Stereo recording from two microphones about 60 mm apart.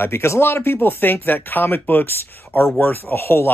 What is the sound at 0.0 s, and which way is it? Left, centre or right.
Speech, left.